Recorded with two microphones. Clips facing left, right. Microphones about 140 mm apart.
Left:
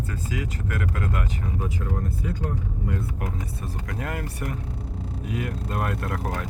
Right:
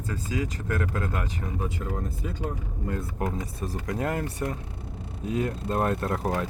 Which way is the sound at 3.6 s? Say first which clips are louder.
Right 5 dB; 30° right (ahead or behind).